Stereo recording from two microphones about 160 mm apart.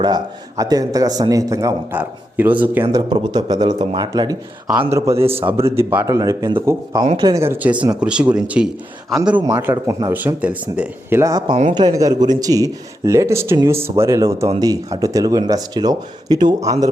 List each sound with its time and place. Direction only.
0.0 s a man's voice: 25° right (ahead or behind)
2.9 s a man's voice: 25° right (ahead or behind)
7.4 s a man's voice: 10° right (ahead or behind)
9.6 s a man's voice: 15° right (ahead or behind)